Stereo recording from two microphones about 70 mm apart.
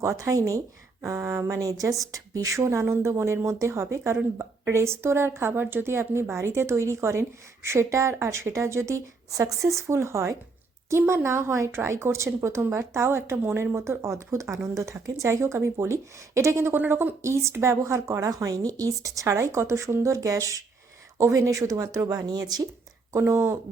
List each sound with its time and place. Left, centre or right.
0.0 s a woman's voice: right
1.0 s a woman's voice: right
14.8 s a woman's voice: right
22.3 s speech: right
23.1 s a woman's voice: right